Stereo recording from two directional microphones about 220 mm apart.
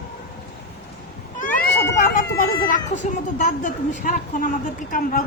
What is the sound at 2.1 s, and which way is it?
Speech, 40° left (ahead or behind).